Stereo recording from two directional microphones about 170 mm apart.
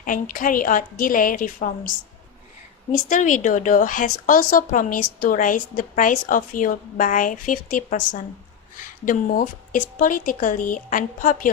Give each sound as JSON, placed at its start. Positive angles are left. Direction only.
{"t": 0.0, "sound": "a woman's voice", "side_deg": 50}
{"t": 3.1, "sound": "a woman's voice", "side_deg": 50}